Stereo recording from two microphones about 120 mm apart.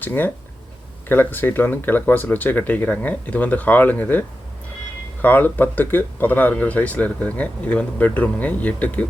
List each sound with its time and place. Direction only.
0.0 s speech: 15° left (ahead or behind)